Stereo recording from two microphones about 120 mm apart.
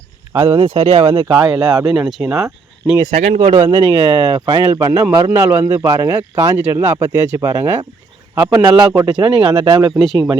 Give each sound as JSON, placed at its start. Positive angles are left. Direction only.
{"t": 0.3, "sound": "speech", "side_deg": -45}
{"t": 1.5, "sound": "speech", "side_deg": -30}
{"t": 1.9, "sound": "speech", "side_deg": -5}
{"t": 3.1, "sound": "speech", "side_deg": -55}
{"t": 3.8, "sound": "speech", "side_deg": -35}
{"t": 5.6, "sound": "speech", "side_deg": -30}
{"t": 7.1, "sound": "speech", "side_deg": -30}